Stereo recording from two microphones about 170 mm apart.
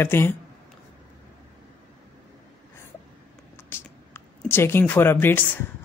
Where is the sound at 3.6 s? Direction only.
15° left (ahead or behind).